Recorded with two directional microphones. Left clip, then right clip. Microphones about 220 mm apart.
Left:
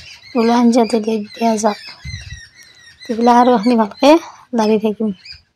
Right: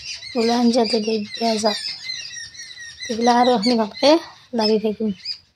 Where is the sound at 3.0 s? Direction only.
15° left (ahead or behind).